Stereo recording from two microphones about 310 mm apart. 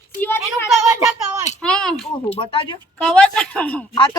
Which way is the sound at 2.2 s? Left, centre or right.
Centre.